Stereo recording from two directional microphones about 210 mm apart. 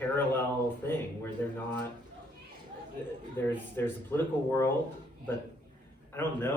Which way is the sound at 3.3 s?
10° left (ahead or behind).